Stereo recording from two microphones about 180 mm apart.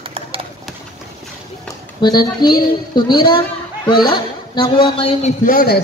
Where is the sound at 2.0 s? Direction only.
25° left (ahead or behind).